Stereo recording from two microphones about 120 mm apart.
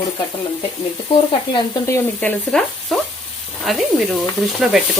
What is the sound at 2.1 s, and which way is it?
Speech, 10° left (ahead or behind).